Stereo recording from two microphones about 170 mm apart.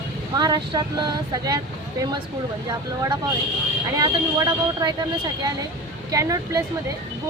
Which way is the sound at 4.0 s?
25° right (ahead or behind).